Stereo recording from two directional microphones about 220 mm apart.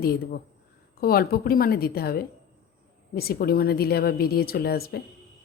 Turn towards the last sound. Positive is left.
turn(degrees=45)  # may be behind; listen again after turning